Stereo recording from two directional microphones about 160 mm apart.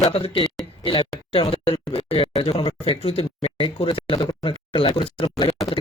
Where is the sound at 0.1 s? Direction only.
35° left (ahead or behind).